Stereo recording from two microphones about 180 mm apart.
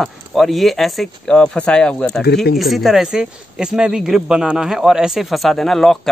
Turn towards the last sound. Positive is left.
turn(degrees=0)  # may be behind; listen again after turning